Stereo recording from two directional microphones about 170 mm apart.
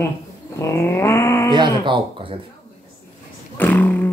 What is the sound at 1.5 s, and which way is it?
Speech, 25° right (ahead or behind).